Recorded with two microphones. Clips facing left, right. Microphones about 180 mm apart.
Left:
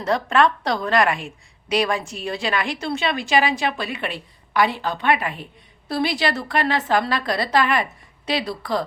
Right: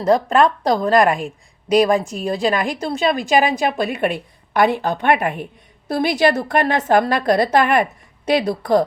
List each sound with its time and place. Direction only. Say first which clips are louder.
0.0 s a woman's voice: right 4 dB; 35° right (ahead or behind)